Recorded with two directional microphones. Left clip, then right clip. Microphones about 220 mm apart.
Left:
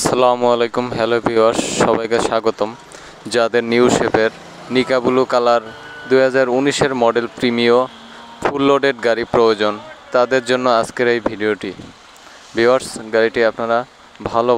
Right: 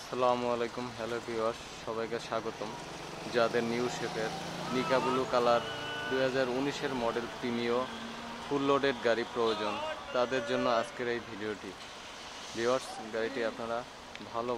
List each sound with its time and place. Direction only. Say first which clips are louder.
0.1 s speech: left 14 dB; 50° left (ahead or behind)
12.5 s speech: left 17 dB; 40° left (ahead or behind)